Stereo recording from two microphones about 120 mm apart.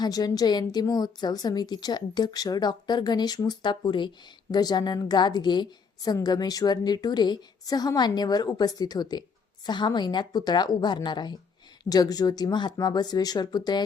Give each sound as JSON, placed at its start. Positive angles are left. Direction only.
{"t": 0.0, "sound": "a woman's voice", "side_deg": 35}